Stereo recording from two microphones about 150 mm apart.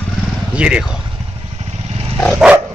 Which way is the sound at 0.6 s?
5° right (ahead or behind).